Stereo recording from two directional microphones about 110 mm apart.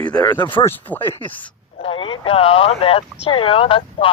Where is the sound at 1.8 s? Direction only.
55° left (ahead or behind).